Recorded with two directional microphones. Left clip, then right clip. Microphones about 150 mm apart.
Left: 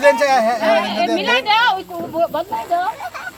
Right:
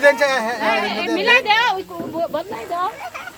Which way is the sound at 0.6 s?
30° right (ahead or behind).